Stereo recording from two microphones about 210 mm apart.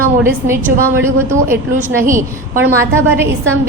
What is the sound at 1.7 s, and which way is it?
Speech, 40° right (ahead or behind).